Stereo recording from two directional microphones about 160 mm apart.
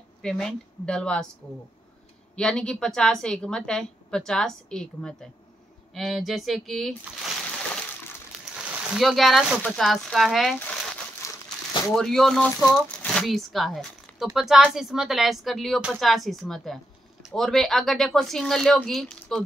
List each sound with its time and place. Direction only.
0.2 s speech: 5° left (ahead or behind)
2.3 s speech: 5° left (ahead or behind)
8.9 s speech: centre (ahead or behind)
11.2 s crumpling: 20° left (ahead or behind)
11.9 s speech: 5° left (ahead or behind)